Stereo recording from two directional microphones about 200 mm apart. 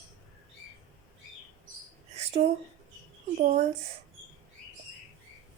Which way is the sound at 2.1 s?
30° right (ahead or behind).